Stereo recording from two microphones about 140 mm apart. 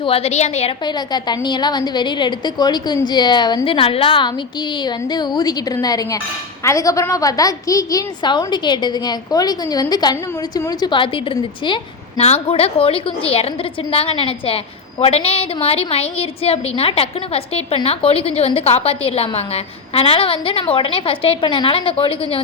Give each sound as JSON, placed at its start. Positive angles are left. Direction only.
{"t": 0.0, "sound": "a woman's voice", "side_deg": 45}
{"t": 0.9, "sound": "a woman's voice", "side_deg": 30}
{"t": 12.1, "sound": "a woman's voice", "side_deg": 50}